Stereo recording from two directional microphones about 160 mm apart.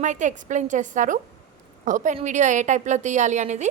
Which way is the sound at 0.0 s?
50° right (ahead or behind).